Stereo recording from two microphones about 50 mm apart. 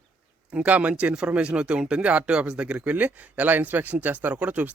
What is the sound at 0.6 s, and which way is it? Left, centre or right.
Speech, right.